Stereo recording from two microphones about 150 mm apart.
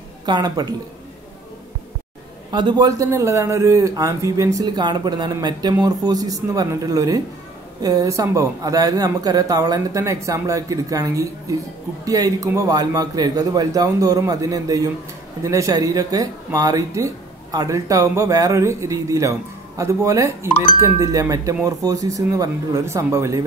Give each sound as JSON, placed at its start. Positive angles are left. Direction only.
{"t": 0.2, "sound": "a man's voice", "side_deg": -30}
{"t": 2.5, "sound": "a man's voice", "side_deg": -30}